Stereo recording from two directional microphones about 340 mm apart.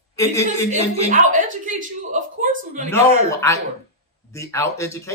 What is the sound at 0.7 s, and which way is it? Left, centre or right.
Speech, centre.